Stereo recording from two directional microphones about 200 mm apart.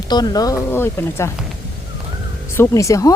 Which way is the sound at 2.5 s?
15° left (ahead or behind).